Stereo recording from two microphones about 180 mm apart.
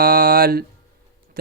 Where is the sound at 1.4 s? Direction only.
60° right (ahead or behind).